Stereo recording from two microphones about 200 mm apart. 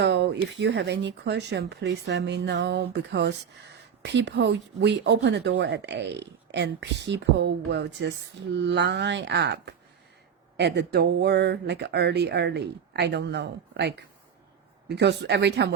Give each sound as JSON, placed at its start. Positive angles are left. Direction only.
{"t": 0.0, "sound": "speech", "side_deg": -60}